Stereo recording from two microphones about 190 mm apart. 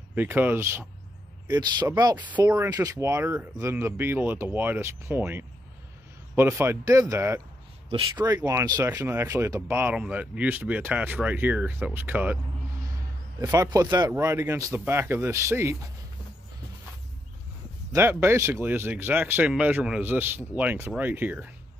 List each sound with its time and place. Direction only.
0.1 s speech: 10° right (ahead or behind)
7.9 s speech: 25° right (ahead or behind); by 12.4 s 10° right (ahead or behind)
13.4 s speech: 20° right (ahead or behind)
17.9 s speech: 15° right (ahead or behind)